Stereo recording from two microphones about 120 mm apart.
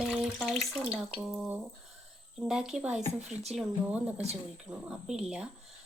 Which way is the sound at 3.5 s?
10° right (ahead or behind).